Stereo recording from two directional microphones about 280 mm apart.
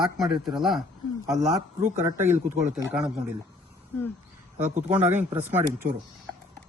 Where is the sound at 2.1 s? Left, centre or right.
Centre.